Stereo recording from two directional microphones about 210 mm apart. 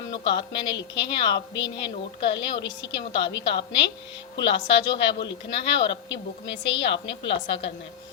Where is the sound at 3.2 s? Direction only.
55° left (ahead or behind).